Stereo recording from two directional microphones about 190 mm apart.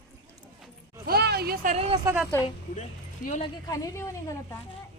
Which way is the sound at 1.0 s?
55° right (ahead or behind).